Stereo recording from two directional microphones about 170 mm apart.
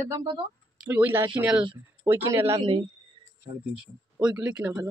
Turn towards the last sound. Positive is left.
turn(degrees=-5)  # may be behind; listen again after turning